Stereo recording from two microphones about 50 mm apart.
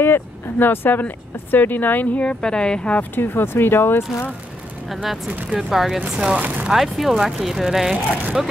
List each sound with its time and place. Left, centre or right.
0.0 s speech: left
2.1 s speech: left
3.0 s speech: left
4.8 s speech: centre
5.3 s speech: right
5.7 s speech: centre
6.1 s speech: right
6.7 s speech: centre